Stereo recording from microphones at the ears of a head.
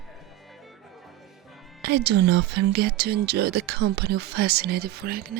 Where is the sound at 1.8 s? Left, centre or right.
Right.